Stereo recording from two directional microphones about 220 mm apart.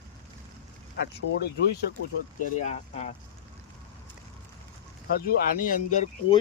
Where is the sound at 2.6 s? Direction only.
30° left (ahead or behind).